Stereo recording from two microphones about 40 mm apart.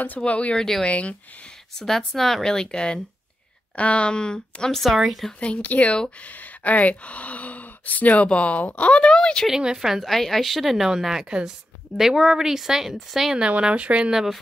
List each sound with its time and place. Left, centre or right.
0.2 s speech: left
0.6 s speech: centre
0.8 s speech: left
1.8 s speech: centre
2.4 s a woman's voice: centre
3.7 s a woman's voice: left
4.8 s speech: centre
5.4 s speech: left
6.2 s speech: left
9.8 s speech: centre
10.0 s speech: centre
13.6 s speech: right
14.1 s speech: centre